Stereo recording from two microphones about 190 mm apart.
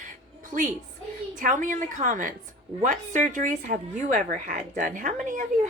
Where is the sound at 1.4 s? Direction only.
40° right (ahead or behind).